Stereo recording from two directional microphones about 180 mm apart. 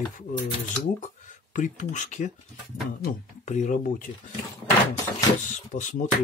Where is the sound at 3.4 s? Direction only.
40° left (ahead or behind).